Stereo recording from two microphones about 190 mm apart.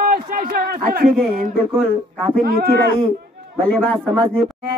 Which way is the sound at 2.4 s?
50° right (ahead or behind).